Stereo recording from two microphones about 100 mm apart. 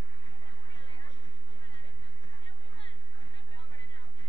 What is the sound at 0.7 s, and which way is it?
Chatter, 55° left (ahead or behind).